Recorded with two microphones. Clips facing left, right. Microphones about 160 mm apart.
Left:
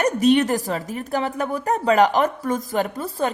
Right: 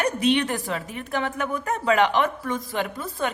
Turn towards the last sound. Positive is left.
turn(degrees=40)  # may be behind; listen again after turning